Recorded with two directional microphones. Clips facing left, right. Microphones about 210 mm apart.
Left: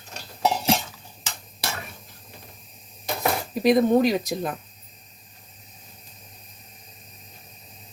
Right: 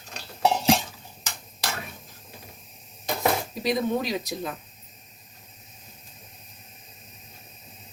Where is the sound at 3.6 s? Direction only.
55° left (ahead or behind).